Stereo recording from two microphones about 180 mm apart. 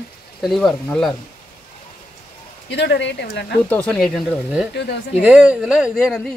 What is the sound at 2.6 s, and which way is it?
Speech, 70° left (ahead or behind).